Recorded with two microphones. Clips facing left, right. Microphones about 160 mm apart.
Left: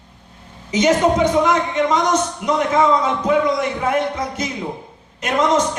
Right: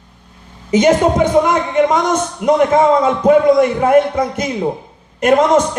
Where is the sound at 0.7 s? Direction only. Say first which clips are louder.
Right 4 dB; 55° right (ahead or behind).